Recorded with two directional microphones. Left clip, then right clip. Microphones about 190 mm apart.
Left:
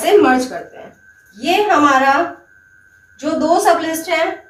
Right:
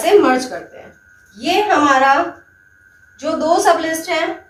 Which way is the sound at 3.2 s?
20° right (ahead or behind).